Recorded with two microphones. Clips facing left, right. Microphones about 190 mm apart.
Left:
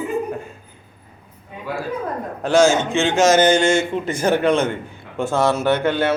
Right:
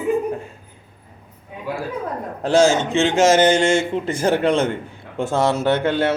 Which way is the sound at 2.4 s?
30° right (ahead or behind).